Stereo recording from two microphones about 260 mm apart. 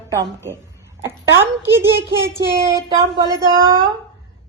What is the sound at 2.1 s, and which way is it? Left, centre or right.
Child singing, left.